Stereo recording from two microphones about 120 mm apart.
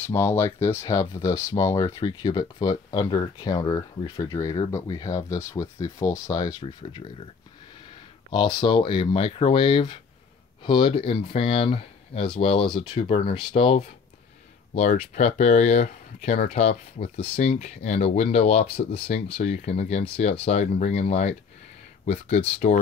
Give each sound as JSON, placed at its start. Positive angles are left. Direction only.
{"t": 0.0, "sound": "speech", "side_deg": 20}
{"t": 2.0, "sound": "speech", "side_deg": 35}
{"t": 6.6, "sound": "speech", "side_deg": 50}
{"t": 8.3, "sound": "speech", "side_deg": 40}
{"t": 14.7, "sound": "speech", "side_deg": 70}